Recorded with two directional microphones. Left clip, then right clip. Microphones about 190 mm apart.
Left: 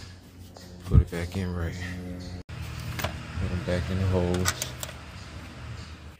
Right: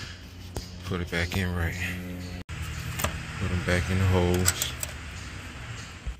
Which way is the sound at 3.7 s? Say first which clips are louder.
Right 2 dB; centre (ahead or behind).